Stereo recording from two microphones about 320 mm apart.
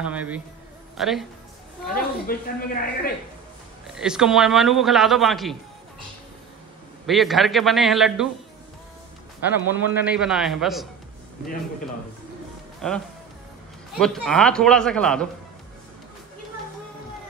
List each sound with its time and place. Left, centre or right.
0.0 s a man's voice: centre
2.0 s speech: left
3.9 s a man's voice: centre
7.1 s a man's voice: centre
9.7 s a man's voice: centre
12.8 s a man's voice: centre